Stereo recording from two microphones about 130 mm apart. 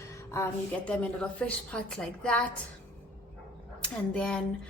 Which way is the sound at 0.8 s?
10° left (ahead or behind).